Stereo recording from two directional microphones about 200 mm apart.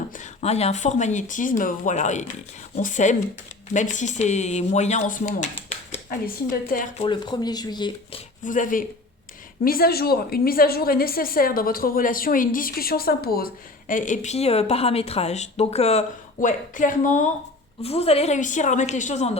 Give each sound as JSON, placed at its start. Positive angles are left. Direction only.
{"t": 0.2, "sound": "speech", "side_deg": 30}
{"t": 6.1, "sound": "a woman's voice", "side_deg": 45}
{"t": 7.0, "sound": "speech", "side_deg": 20}
{"t": 8.4, "sound": "a woman's voice", "side_deg": 40}